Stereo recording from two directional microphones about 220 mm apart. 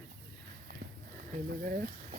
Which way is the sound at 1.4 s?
45° right (ahead or behind).